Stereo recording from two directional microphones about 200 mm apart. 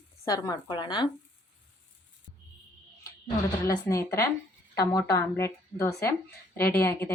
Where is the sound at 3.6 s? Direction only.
15° left (ahead or behind).